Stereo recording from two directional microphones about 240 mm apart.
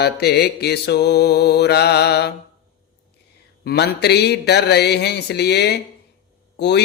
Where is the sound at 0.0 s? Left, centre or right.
Left.